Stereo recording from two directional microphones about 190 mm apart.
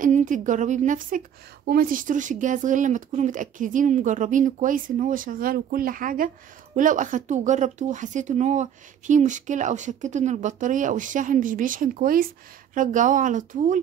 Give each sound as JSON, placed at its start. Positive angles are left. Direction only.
{"t": 0.0, "sound": "a woman's voice", "side_deg": -40}